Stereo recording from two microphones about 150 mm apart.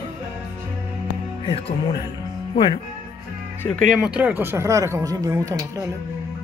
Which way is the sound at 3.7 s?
Centre (ahead or behind).